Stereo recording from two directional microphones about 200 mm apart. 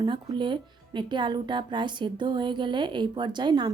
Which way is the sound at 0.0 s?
25° right (ahead or behind).